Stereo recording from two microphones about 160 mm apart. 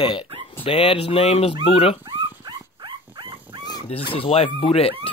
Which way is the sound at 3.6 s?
25° left (ahead or behind).